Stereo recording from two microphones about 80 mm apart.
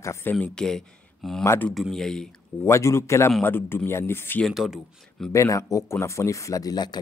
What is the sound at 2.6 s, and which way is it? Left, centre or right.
Speech, left.